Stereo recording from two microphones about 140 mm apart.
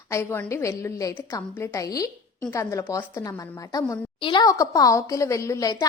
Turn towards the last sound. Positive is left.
turn(degrees=25)  # may be behind; listen again after turning